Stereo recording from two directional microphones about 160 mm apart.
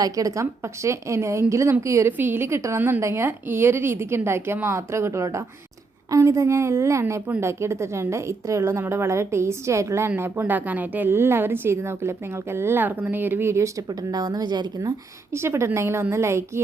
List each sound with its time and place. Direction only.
0.0 s a woman's voice: 20° right (ahead or behind)